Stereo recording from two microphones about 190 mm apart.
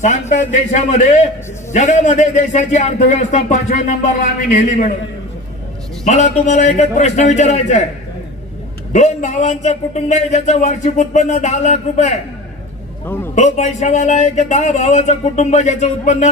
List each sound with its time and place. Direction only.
0.0 s a man's voice: 40° left (ahead or behind)
6.1 s a man's voice: 35° left (ahead or behind)
8.9 s a man's voice: 40° left (ahead or behind)
13.1 s a man's voice: 10° left (ahead or behind)
13.3 s a man's voice: 40° left (ahead or behind)